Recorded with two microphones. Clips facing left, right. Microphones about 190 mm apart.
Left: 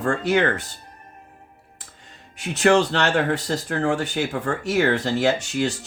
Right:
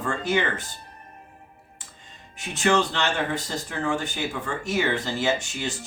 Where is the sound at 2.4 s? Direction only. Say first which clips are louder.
Left 5 dB; 70° left (ahead or behind).